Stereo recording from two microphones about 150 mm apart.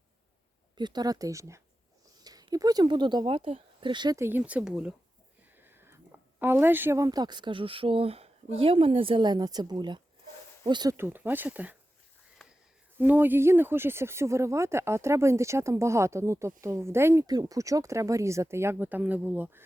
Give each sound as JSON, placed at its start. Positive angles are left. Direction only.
{"t": 0.8, "sound": "speech", "side_deg": -30}
{"t": 4.2, "sound": "speech", "side_deg": -15}
{"t": 10.9, "sound": "speech", "side_deg": -15}
{"t": 12.4, "sound": "a sound", "side_deg": 5}
{"t": 13.0, "sound": "speech", "side_deg": -15}